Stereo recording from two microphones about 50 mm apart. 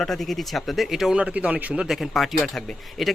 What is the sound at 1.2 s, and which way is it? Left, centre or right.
Speech, right.